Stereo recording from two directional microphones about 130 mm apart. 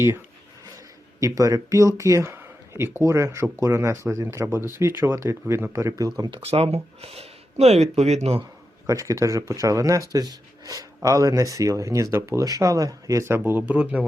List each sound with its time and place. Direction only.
1.2 s speech: 25° right (ahead or behind)
6.4 s speech: 50° right (ahead or behind)
8.9 s speech: 25° right (ahead or behind)